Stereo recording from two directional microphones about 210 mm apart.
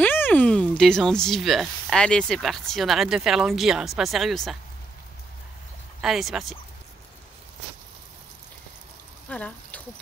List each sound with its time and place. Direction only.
0.0 s speech: 10° left (ahead or behind)
5.9 s speech: centre (ahead or behind)
9.3 s speech: 5° left (ahead or behind)